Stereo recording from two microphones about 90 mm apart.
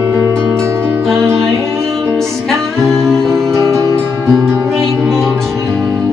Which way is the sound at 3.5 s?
35° right (ahead or behind).